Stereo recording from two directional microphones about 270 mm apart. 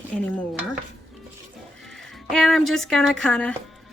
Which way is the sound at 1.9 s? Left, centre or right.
Centre.